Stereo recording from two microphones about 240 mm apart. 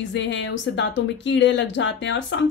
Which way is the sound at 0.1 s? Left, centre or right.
Left.